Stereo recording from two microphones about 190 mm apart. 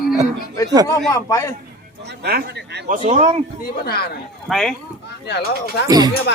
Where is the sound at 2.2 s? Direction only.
55° right (ahead or behind).